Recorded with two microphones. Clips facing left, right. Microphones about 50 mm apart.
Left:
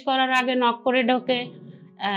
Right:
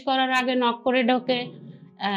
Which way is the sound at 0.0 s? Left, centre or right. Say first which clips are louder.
Left 1 dB; left.